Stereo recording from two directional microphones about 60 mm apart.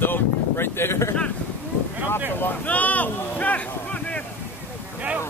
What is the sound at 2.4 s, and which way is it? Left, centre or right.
Speech, left.